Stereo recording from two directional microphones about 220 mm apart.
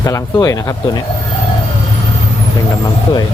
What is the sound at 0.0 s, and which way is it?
Speech, 15° left (ahead or behind).